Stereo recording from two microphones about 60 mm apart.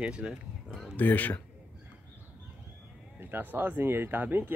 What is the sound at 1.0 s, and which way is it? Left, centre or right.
Speech, left.